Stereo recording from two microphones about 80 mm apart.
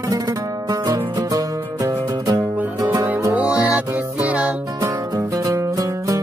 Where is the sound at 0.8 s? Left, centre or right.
Right.